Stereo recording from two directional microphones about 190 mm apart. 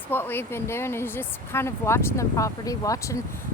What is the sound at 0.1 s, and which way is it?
A woman's voice, 10° left (ahead or behind).